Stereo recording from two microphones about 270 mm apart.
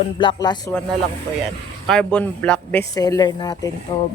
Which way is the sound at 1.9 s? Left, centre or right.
Centre.